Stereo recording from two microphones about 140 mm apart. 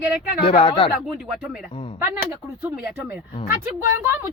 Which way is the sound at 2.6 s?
15° right (ahead or behind).